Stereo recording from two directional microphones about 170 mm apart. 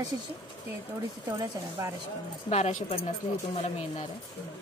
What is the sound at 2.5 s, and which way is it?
Speech, 40° left (ahead or behind).